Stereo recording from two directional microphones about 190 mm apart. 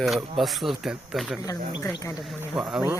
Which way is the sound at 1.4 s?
15° left (ahead or behind).